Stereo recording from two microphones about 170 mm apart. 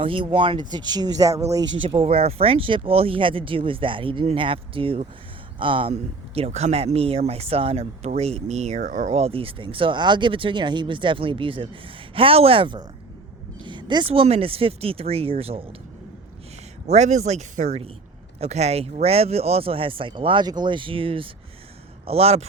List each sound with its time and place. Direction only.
0.0 s speech: 30° right (ahead or behind)
1.8 s speech: 35° right (ahead or behind)
16.8 s a man's voice: 40° right (ahead or behind)